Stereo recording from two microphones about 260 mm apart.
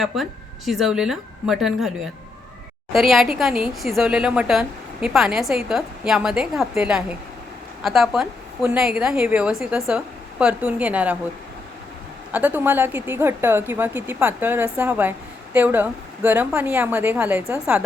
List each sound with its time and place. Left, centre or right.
0.0 s a woman's voice: centre
2.9 s a woman's voice: centre
12.3 s a woman's voice: centre